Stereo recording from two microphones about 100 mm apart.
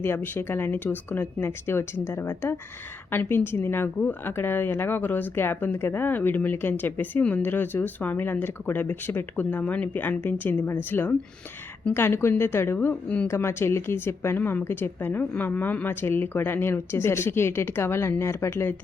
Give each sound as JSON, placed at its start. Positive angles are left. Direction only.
{"t": 0.0, "sound": "speech", "side_deg": 20}
{"t": 12.9, "sound": "speech", "side_deg": 10}
{"t": 13.2, "sound": "speech", "side_deg": 25}